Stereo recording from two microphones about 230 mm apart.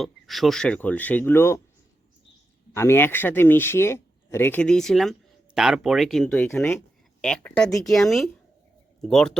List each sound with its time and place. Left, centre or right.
0.0 s speech: centre
2.7 s speech: centre